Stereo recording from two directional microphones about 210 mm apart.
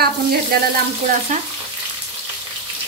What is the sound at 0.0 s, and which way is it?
Speech, 45° right (ahead or behind).